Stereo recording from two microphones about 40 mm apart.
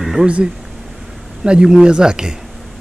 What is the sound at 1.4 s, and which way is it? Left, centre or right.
Speech, right.